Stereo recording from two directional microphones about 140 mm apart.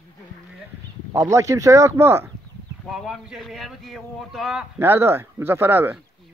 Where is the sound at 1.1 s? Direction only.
20° right (ahead or behind).